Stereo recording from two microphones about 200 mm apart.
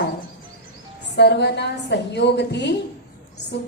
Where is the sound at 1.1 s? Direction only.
55° left (ahead or behind).